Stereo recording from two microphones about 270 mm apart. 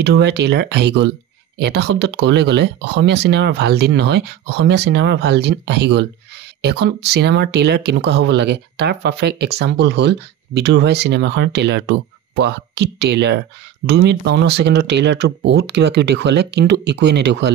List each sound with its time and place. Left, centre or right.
0.0 s speech: right